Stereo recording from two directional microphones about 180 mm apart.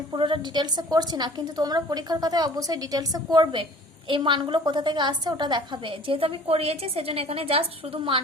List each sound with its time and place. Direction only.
0.1 s a woman's voice: 25° right (ahead or behind)